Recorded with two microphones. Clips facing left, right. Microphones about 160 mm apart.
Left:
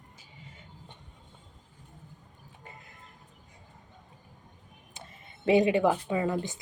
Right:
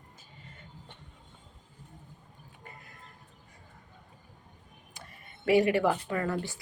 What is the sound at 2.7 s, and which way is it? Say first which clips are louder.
Music: left 1 dB; 20° left (ahead or behind).